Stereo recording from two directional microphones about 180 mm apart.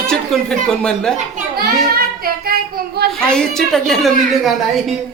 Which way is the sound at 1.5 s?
55° right (ahead or behind).